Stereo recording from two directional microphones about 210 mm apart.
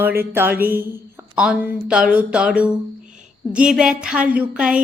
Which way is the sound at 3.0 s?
35° right (ahead or behind).